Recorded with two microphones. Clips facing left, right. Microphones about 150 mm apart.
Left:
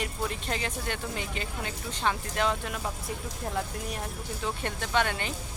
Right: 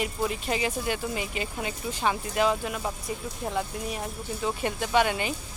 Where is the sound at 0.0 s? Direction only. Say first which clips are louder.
Right 4 dB; 5° right (ahead or behind).